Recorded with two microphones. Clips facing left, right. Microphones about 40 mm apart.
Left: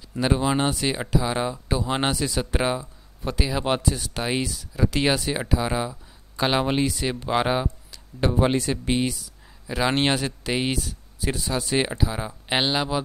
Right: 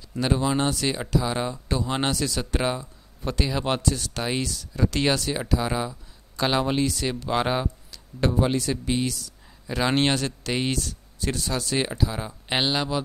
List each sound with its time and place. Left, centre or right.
0.2 s speech: centre
8.3 s speech: left
9.7 s speech: centre